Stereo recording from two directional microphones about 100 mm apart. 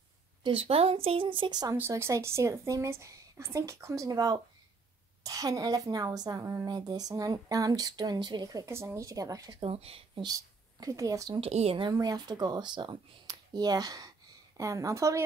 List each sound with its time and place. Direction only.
0.4 s a woman's voice: 65° right (ahead or behind); by 1.8 s 45° right (ahead or behind)
1.8 s a woman's voice: 25° right (ahead or behind); by 8.6 s 45° right (ahead or behind)
8.6 s speech: 30° right (ahead or behind)
9.6 s speech: 70° right (ahead or behind)
10.2 s speech: 40° right (ahead or behind)
11.4 s speech: 80° right
11.9 s speech: 40° right (ahead or behind)